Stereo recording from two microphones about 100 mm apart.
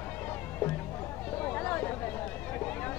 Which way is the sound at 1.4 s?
20° left (ahead or behind).